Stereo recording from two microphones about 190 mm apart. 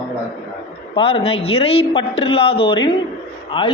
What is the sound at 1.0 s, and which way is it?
A man's voice, 30° left (ahead or behind).